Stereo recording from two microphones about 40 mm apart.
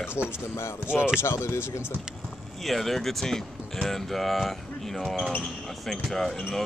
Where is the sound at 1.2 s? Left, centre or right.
Left.